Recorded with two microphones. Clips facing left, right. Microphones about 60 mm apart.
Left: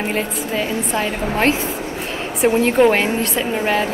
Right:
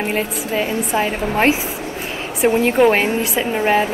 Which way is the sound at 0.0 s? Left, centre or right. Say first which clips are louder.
Right 1 dB; centre.